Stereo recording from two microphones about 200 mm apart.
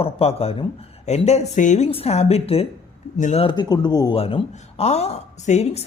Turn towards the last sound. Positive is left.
turn(degrees=35)  # may be behind; listen again after turning